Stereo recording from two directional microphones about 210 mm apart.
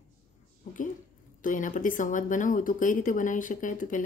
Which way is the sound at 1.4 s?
40° left (ahead or behind).